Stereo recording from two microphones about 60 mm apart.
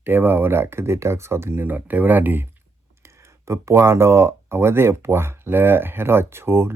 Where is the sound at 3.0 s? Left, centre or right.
Right.